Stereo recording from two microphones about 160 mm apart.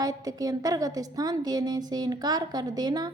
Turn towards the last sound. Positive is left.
turn(degrees=-25)  # may be behind; listen again after turning